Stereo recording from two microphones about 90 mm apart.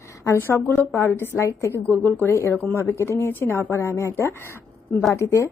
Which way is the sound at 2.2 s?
30° left (ahead or behind).